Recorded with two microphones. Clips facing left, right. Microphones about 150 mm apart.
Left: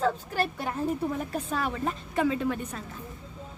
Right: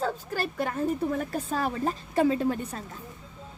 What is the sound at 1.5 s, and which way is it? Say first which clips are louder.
A woman's voice: right 2 dB; 35° right (ahead or behind).